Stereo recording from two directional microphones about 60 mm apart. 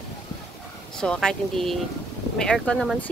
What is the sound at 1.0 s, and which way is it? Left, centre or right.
Speech, centre.